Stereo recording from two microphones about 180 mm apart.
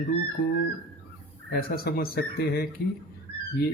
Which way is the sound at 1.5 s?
55° left (ahead or behind).